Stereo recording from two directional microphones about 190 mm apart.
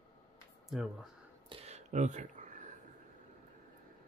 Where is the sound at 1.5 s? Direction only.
35° right (ahead or behind).